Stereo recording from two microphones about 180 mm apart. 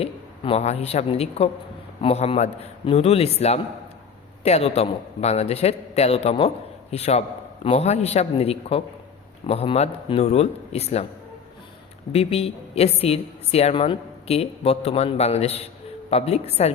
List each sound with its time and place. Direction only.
0.0 s a man's voice: 35° left (ahead or behind)
12.1 s a woman's voice: 35° left (ahead or behind)